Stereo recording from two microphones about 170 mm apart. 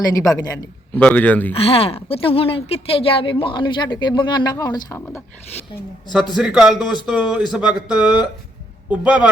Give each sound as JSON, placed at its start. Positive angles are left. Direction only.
{"t": 0.1, "sound": "a man's voice", "side_deg": 20}
{"t": 1.0, "sound": "speech", "side_deg": 10}
{"t": 1.5, "sound": "speech", "side_deg": 35}
{"t": 6.3, "sound": "a man's voice", "side_deg": -5}